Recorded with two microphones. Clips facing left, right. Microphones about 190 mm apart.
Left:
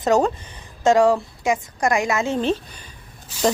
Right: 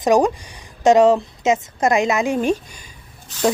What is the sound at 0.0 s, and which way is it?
A woman's voice, 15° right (ahead or behind).